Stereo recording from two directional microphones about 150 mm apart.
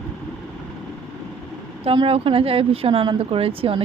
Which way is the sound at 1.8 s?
35° right (ahead or behind).